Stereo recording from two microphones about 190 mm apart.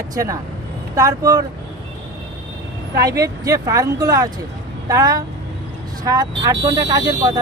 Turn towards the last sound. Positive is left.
turn(degrees=-20)  # may be behind; listen again after turning